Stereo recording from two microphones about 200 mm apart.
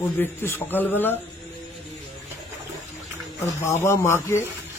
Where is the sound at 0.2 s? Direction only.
10° left (ahead or behind).